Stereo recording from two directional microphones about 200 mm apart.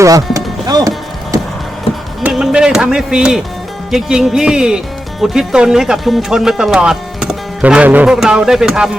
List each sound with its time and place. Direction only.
0.0 s music: 15° right (ahead or behind)
2.2 s speech: 5° right (ahead or behind)